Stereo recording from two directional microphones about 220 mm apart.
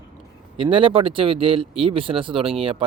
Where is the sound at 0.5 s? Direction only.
25° right (ahead or behind).